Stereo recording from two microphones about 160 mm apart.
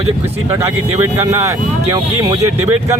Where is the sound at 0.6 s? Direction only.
20° right (ahead or behind).